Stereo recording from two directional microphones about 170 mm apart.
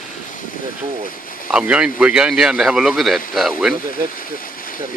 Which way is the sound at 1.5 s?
5° right (ahead or behind).